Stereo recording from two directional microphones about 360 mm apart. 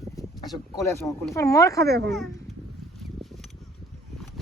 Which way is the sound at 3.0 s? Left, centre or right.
Centre.